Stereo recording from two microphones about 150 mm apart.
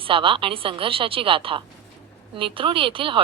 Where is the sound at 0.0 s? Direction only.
35° right (ahead or behind).